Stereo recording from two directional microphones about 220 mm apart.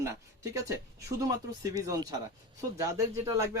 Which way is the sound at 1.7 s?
15° right (ahead or behind).